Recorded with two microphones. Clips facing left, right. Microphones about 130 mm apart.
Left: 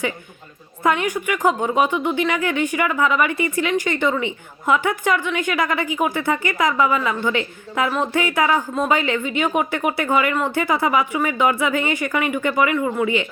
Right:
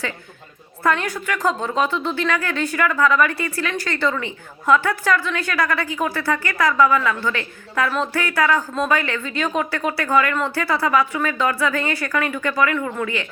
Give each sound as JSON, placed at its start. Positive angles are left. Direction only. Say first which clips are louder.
{"t": 0.9, "sound": "speech", "louder": "left 2 dB", "side_deg": 15}